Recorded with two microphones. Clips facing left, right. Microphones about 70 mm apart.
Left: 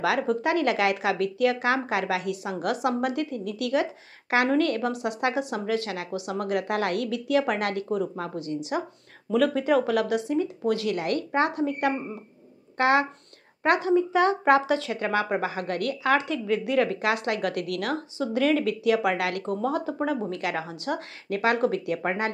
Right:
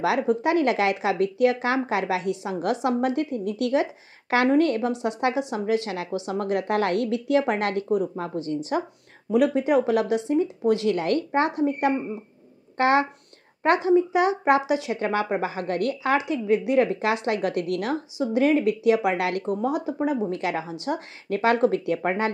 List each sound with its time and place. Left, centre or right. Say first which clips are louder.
0.0 s a woman's voice: right 2 dB; right
9.3 s a woman's voice: right 2 dB; right